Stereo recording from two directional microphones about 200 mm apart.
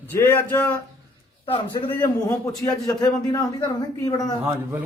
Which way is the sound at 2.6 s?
20° left (ahead or behind).